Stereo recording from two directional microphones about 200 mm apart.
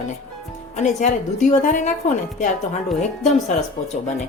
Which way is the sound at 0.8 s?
35° left (ahead or behind).